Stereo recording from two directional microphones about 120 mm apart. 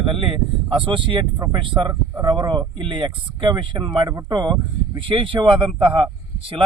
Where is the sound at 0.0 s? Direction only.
45° right (ahead or behind).